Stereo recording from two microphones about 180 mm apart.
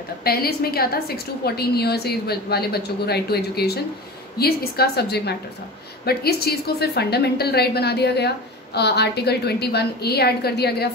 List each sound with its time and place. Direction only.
0.2 s a woman's voice: 60° left (ahead or behind)